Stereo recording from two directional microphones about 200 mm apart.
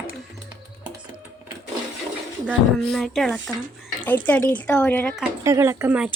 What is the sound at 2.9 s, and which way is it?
Speech, centre (ahead or behind).